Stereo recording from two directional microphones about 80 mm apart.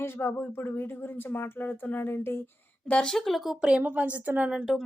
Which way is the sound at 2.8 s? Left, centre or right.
Centre.